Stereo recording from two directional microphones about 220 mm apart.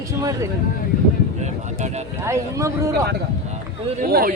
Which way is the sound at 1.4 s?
30° right (ahead or behind).